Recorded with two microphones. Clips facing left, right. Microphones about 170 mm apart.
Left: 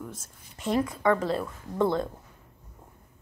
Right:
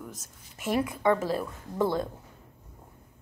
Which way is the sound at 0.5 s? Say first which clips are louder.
Left 1 dB; 10° right (ahead or behind).